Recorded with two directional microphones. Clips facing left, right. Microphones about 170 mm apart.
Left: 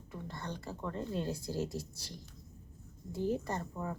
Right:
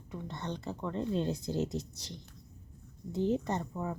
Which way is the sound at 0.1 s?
20° right (ahead or behind).